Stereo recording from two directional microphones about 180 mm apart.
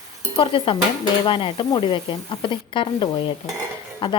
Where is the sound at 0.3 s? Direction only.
30° left (ahead or behind).